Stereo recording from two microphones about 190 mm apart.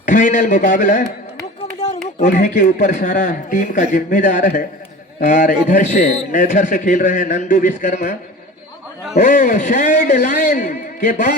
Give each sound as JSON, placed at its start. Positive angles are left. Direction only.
{"t": 0.0, "sound": "a man's voice", "side_deg": 40}
{"t": 2.1, "sound": "a man's voice", "side_deg": 40}
{"t": 9.1, "sound": "a man's voice", "side_deg": 40}